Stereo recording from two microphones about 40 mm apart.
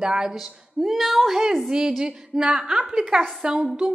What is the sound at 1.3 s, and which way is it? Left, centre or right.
A woman's voice, centre.